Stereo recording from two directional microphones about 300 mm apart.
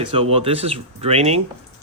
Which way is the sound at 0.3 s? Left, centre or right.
Centre.